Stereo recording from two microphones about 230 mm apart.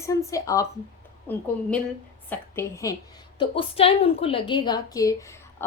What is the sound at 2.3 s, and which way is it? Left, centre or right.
A woman's voice, centre.